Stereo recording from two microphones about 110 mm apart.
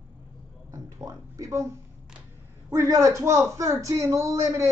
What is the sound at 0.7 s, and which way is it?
Speech, 30° right (ahead or behind).